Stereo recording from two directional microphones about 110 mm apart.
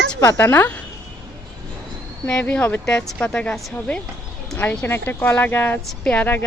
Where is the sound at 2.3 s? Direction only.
15° left (ahead or behind).